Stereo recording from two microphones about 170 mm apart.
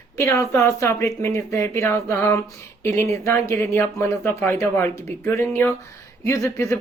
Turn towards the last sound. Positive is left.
turn(degrees=15)  # may be behind; listen again after turning